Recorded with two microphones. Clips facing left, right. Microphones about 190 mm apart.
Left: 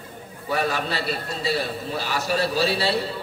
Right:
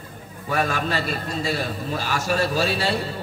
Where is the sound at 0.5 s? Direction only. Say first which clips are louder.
Right 1 dB; 45° right (ahead or behind).